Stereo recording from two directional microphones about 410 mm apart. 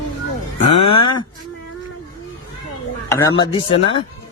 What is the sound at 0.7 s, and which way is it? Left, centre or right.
Speech, left.